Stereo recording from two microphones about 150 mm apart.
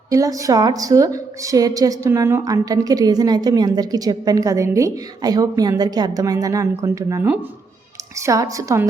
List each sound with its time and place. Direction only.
0.1 s a woman's voice: 20° right (ahead or behind)
8.2 s a woman's voice: 20° right (ahead or behind)